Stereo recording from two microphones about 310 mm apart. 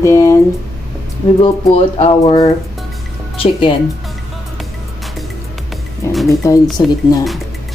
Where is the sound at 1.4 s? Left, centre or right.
Centre.